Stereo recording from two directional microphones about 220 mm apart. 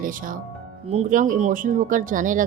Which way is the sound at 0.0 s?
40° right (ahead or behind).